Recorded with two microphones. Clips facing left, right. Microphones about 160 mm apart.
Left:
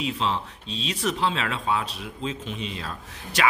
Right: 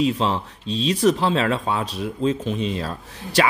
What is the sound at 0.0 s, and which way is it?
Speech, 40° right (ahead or behind).